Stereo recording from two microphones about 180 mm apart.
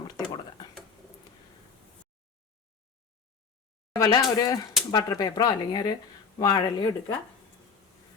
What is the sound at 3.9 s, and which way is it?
A woman's voice, 20° left (ahead or behind).